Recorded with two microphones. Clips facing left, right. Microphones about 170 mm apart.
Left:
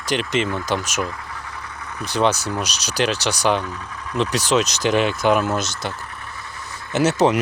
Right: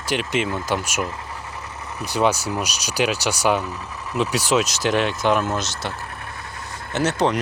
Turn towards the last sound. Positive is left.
turn(degrees=5)  # may be behind; listen again after turning